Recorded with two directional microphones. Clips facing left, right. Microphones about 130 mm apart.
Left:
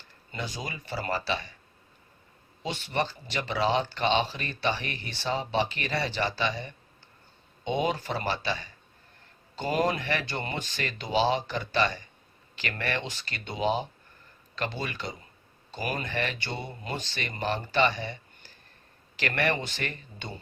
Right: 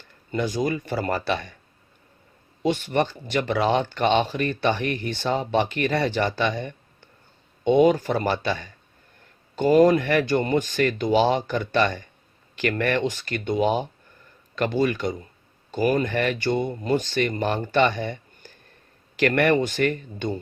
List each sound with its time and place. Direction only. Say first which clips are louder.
0.3 s speech: right 12 dB; 50° right (ahead or behind)
2.6 s speech: right 8 dB; 50° right (ahead or behind)